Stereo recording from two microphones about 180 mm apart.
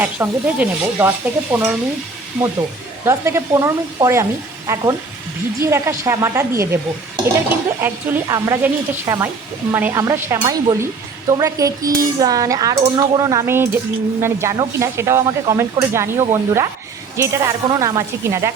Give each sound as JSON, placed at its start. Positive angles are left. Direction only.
{"t": 0.0, "sound": "speech", "side_deg": -10}
{"t": 3.0, "sound": "speech", "side_deg": -15}
{"t": 7.8, "sound": "speech", "side_deg": -10}